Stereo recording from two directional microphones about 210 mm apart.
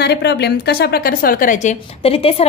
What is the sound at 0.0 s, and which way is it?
A woman's voice, 50° left (ahead or behind).